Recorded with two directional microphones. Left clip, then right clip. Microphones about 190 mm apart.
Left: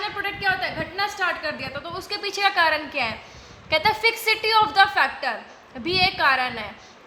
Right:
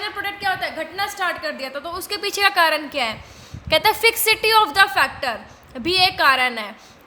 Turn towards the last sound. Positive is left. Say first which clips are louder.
# right 4 dB
turn(degrees=-50)  # may be behind; listen again after turning